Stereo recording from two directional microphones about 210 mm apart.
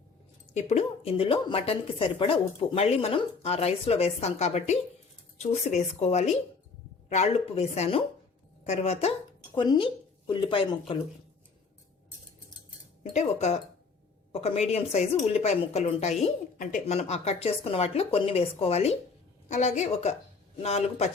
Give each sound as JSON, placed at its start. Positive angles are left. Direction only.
{"t": 0.5, "sound": "speech", "side_deg": 30}
{"t": 13.0, "sound": "speech", "side_deg": 30}